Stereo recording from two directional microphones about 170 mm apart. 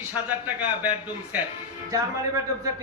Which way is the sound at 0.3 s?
10° right (ahead or behind).